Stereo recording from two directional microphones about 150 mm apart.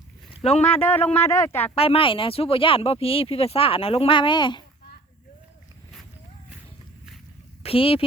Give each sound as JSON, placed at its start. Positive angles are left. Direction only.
{"t": 0.6, "sound": "speech", "side_deg": 10}
{"t": 1.7, "sound": "speech", "side_deg": 40}
{"t": 7.6, "sound": "speech", "side_deg": 40}